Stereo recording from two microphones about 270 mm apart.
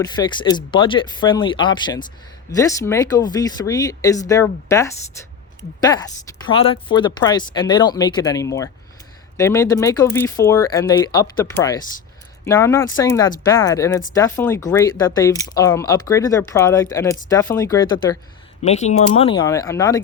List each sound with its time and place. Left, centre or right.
0.0 s speech: centre
6.2 s speech: centre